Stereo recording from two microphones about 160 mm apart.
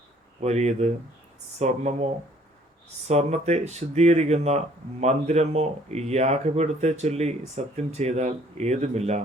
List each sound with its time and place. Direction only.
0.3 s speech: 40° right (ahead or behind)
3.1 s speech: 40° right (ahead or behind)